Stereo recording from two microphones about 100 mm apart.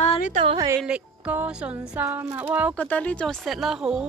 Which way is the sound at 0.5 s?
35° right (ahead or behind).